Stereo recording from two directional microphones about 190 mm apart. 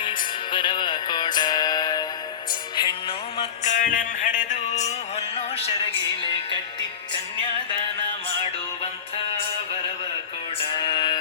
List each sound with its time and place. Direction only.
0.0 s music: 25° left (ahead or behind)
10.7 s music: 25° left (ahead or behind)